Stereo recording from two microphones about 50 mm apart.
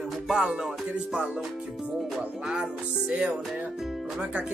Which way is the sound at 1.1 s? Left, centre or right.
Centre.